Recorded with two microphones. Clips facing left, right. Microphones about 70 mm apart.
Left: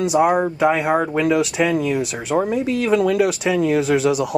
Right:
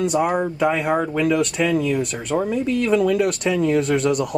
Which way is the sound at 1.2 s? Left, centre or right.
Centre.